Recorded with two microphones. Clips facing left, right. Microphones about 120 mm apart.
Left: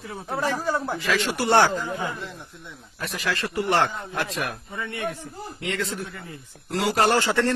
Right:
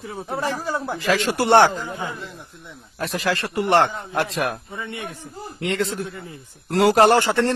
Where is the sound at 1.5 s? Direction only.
25° right (ahead or behind).